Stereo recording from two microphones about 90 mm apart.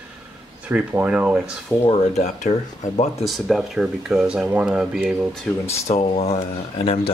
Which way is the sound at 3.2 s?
Centre (ahead or behind).